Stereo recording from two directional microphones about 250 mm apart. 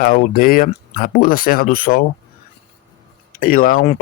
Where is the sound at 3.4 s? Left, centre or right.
Left.